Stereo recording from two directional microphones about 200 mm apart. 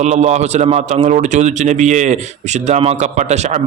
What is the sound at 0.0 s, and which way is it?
A man's voice, 35° right (ahead or behind).